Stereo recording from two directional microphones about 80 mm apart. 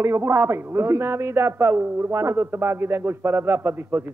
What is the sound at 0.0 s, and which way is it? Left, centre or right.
A man's voice, right.